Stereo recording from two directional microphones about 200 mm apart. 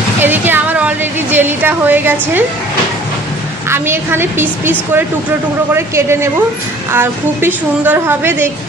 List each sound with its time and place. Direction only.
0.2 s a woman's voice: 10° right (ahead or behind)
3.6 s a woman's voice: 10° right (ahead or behind)